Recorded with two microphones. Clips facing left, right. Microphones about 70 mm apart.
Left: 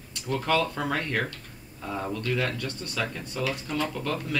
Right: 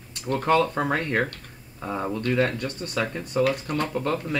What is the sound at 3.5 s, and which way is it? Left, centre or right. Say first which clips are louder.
Speech: right 4 dB; right.